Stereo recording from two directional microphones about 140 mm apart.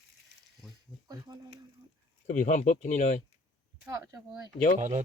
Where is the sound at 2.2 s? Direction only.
65° left (ahead or behind).